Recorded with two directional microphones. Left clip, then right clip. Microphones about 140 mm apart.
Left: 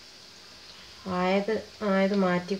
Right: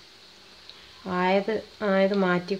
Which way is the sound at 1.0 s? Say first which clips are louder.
Right 3 dB; 65° right (ahead or behind).